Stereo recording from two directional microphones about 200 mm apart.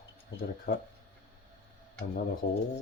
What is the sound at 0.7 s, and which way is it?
Speech, 45° left (ahead or behind).